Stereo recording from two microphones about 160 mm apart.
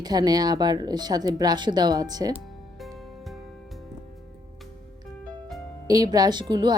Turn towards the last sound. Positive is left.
turn(degrees=-25)  # may be behind; listen again after turning